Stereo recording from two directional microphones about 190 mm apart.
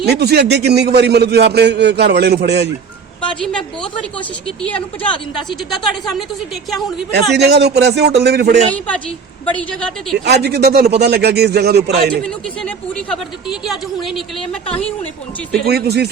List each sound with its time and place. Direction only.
0.0 s a man's voice: 60° right (ahead or behind)
3.4 s a woman's voice: 5° left (ahead or behind)
5.5 s a woman's voice: centre (ahead or behind)
7.1 s a man's voice: 60° right (ahead or behind)
9.6 s a woman's voice: 5° left (ahead or behind)
10.2 s a man's voice: 60° right (ahead or behind)
12.2 s a woman's voice: 5° left (ahead or behind)
15.6 s a man's voice: 55° right (ahead or behind)